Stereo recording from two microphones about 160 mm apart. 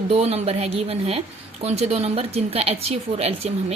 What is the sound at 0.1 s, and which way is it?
Speech, 40° right (ahead or behind).